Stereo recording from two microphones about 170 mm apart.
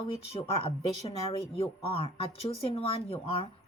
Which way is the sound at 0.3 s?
35° left (ahead or behind).